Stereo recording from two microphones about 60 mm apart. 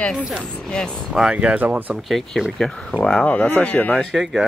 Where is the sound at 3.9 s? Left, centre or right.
Centre.